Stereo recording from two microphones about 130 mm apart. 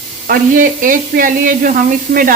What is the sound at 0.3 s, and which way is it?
Speech, 90° right.